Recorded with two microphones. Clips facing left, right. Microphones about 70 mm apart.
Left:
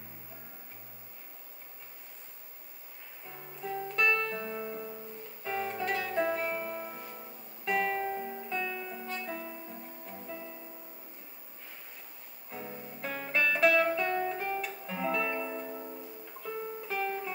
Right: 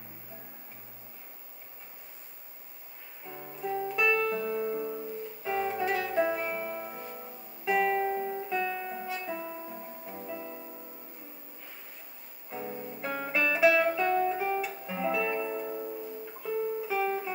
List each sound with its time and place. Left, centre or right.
3.3 s music: centre
9.1 s music: centre
12.4 s music: centre